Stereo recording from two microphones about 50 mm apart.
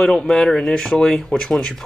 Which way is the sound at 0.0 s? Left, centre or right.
Centre.